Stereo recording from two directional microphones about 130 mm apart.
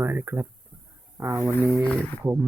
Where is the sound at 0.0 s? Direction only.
20° right (ahead or behind).